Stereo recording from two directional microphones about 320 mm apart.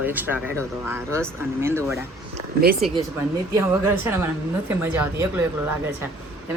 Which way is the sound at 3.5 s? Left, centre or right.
Centre.